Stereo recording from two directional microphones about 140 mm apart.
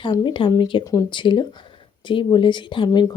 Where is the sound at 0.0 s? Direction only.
35° left (ahead or behind).